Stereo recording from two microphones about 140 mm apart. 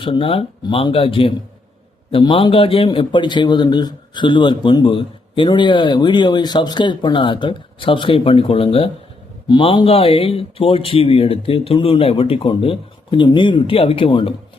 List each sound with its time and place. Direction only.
0.0 s a man's voice: 40° left (ahead or behind)